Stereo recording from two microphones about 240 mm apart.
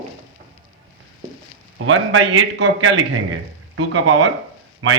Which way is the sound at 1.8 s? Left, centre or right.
Right.